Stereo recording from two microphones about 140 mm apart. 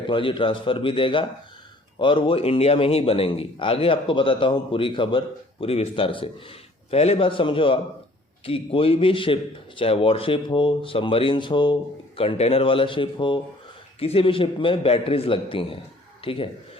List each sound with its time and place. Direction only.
0.1 s a man's voice: 35° left (ahead or behind)